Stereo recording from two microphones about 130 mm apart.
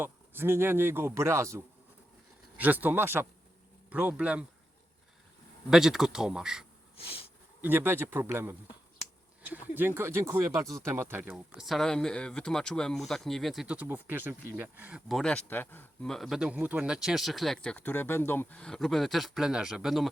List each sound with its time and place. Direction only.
0.0 s speech: 15° right (ahead or behind)
5.7 s speech: 5° right (ahead or behind)
6.9 s a sound: 45° left (ahead or behind)
7.6 s speech: 15° right (ahead or behind); by 15.9 s 15° left (ahead or behind)
16.0 s speech: centre (ahead or behind)